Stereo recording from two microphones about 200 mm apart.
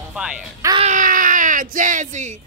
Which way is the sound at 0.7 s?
35° right (ahead or behind).